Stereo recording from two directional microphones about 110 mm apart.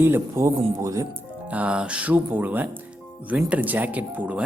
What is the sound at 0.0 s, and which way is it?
Speech, 25° right (ahead or behind).